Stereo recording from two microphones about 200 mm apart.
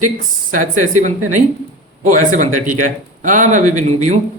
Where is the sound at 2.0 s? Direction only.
40° right (ahead or behind).